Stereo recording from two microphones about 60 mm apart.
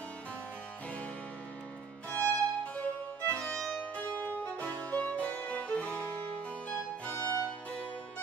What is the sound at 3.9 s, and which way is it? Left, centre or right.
Music, left.